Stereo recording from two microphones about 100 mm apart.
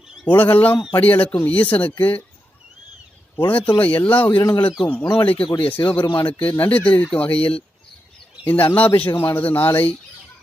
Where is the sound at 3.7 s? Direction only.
15° left (ahead or behind).